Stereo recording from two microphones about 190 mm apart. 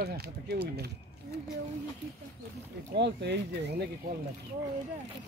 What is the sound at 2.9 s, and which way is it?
Speech, 60° right (ahead or behind).